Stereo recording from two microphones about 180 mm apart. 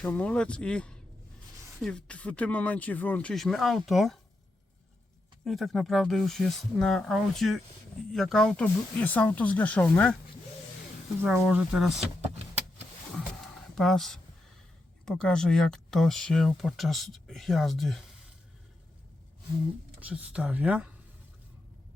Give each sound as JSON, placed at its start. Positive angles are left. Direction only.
{"t": 0.0, "sound": "speech", "side_deg": 10}
{"t": 5.5, "sound": "speech", "side_deg": 0}
{"t": 11.2, "sound": "speech", "side_deg": -10}
{"t": 12.2, "sound": "vehicle", "side_deg": -35}
{"t": 13.1, "sound": "a sound", "side_deg": 0}
{"t": 15.0, "sound": "speech", "side_deg": 5}
{"t": 20.0, "sound": "speech", "side_deg": -5}